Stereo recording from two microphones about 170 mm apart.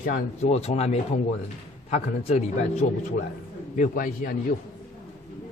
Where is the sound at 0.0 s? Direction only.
45° left (ahead or behind).